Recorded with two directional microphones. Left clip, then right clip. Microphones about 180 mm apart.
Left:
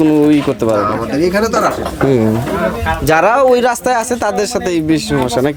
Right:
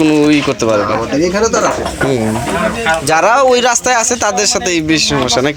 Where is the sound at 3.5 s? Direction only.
40° left (ahead or behind).